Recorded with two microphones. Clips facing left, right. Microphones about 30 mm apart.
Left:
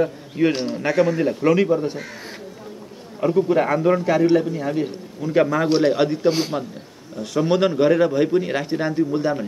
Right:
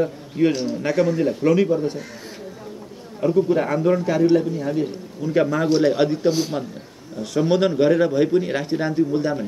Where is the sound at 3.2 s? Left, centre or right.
Centre.